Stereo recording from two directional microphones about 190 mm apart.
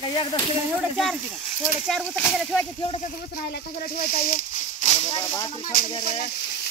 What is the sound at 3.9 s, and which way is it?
Snake, 50° left (ahead or behind).